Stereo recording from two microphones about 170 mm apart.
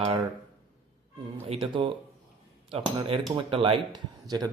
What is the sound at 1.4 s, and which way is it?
A man's voice, 35° right (ahead or behind).